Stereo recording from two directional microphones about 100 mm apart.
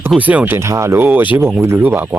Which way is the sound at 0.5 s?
30° right (ahead or behind).